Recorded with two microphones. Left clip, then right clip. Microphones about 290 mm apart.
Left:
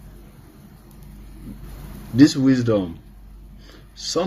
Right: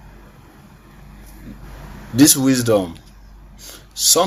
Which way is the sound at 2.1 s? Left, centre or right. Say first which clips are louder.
Right 1 dB; right.